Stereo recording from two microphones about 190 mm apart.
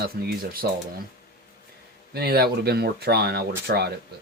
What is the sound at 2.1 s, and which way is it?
Speech, 55° right (ahead or behind).